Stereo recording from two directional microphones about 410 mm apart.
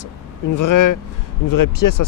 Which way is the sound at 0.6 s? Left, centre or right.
Left.